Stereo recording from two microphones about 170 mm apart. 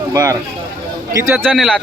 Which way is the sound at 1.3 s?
5° right (ahead or behind).